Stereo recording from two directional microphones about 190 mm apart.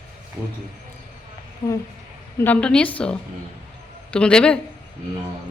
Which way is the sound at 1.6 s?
25° left (ahead or behind).